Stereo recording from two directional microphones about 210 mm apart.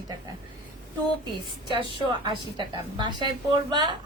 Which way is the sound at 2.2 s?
20° right (ahead or behind).